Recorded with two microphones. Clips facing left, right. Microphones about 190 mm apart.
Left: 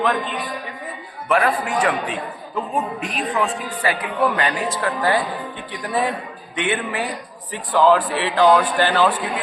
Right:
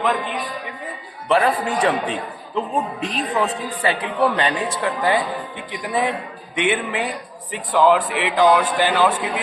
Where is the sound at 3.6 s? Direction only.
30° right (ahead or behind).